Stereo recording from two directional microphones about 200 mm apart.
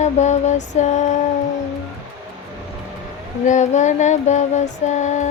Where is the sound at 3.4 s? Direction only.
40° left (ahead or behind).